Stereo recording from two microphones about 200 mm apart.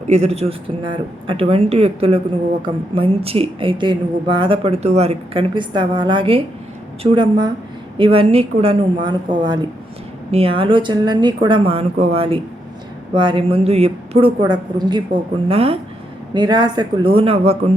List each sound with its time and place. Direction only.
0.1 s speech: 35° right (ahead or behind)